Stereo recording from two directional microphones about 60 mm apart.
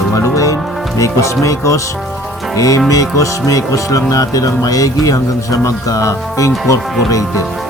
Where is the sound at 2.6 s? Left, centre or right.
Left.